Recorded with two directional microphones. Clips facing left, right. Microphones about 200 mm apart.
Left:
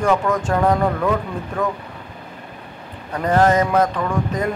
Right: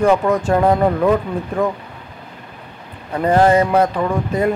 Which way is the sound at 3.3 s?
10° right (ahead or behind).